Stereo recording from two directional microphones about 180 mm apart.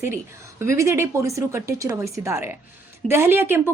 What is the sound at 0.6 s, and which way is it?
A woman's voice, 15° right (ahead or behind).